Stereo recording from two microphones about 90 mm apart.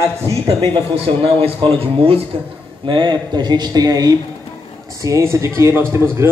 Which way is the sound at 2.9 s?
55° right (ahead or behind).